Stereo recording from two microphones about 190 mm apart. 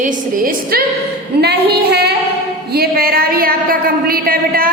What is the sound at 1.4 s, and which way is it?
Female singing, 60° right (ahead or behind).